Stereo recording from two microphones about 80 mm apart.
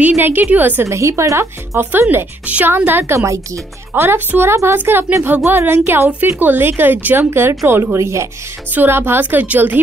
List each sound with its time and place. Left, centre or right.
0.0 s speech: right
0.8 s a woman's voice: right; by 2.7 s centre
2.9 s speech: right